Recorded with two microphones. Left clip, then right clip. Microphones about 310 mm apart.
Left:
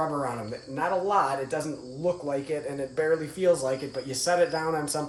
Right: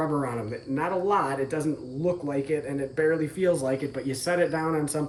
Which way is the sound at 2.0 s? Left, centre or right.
Centre.